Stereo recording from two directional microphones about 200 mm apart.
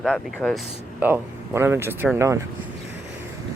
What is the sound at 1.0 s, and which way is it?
Speech, 10° right (ahead or behind).